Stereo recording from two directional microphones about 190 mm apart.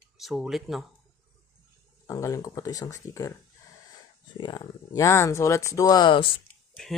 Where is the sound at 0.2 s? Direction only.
Centre (ahead or behind).